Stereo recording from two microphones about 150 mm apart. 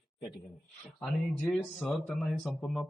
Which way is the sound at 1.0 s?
Centre (ahead or behind).